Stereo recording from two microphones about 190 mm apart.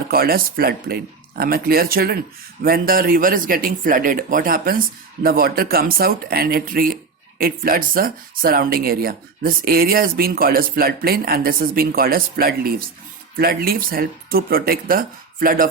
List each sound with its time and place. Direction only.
0.1 s speech: 50° right (ahead or behind)